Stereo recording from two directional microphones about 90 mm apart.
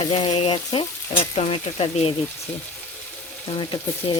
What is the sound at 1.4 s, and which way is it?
Speech, 90° left.